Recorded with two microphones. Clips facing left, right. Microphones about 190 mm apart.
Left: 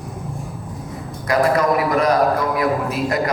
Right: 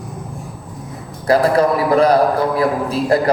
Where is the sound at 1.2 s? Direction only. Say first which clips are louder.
Right 3 dB; 30° right (ahead or behind).